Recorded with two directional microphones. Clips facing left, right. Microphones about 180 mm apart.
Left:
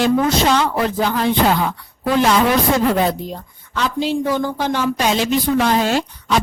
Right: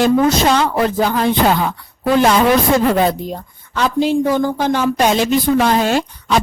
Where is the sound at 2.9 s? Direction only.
50° right (ahead or behind).